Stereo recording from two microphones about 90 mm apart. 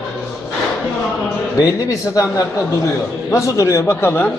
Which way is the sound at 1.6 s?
40° left (ahead or behind).